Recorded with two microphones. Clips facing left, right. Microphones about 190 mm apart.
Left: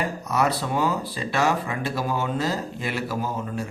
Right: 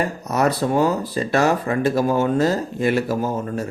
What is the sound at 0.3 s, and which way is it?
Speech, 45° right (ahead or behind).